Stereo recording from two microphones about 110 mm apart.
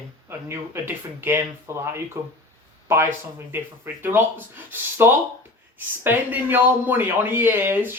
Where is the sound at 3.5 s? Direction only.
20° right (ahead or behind).